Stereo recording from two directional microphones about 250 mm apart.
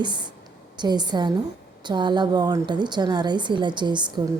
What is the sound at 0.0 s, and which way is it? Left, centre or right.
A woman's voice, centre.